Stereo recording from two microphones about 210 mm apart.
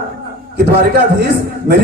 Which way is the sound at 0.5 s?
50° right (ahead or behind).